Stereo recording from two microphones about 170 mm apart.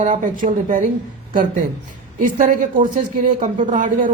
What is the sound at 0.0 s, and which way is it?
Speech, 50° right (ahead or behind).